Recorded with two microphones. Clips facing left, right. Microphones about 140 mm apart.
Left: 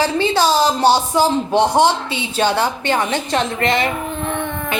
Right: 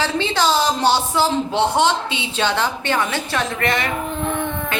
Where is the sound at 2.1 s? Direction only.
45° left (ahead or behind).